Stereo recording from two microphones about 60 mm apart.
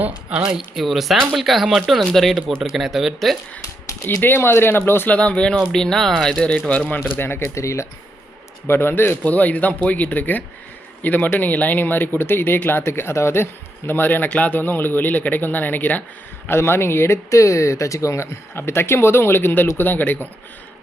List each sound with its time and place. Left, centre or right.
0.0 s speech: right
0.5 s speech: centre
4.0 s speech: left
5.0 s speech: left
7.2 s speech: left
8.6 s speech: left
9.2 s speech: left
12.8 s speech: left
14.3 s speech: left
14.5 s speech: left
16.5 s speech: left